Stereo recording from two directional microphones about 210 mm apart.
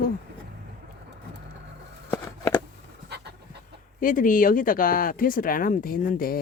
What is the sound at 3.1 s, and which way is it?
Pant, 50° right (ahead or behind).